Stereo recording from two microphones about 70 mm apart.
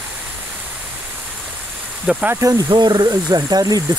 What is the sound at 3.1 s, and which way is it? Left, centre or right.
Speech, right.